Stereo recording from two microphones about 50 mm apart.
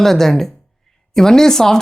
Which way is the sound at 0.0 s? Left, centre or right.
Centre.